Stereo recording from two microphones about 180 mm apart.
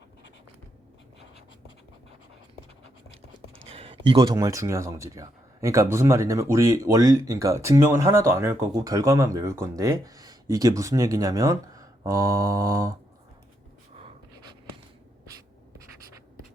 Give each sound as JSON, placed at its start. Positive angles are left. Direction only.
{"t": 3.7, "sound": "speech", "side_deg": -35}